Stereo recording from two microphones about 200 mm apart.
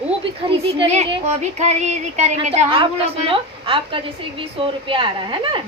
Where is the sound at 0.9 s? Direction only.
35° right (ahead or behind).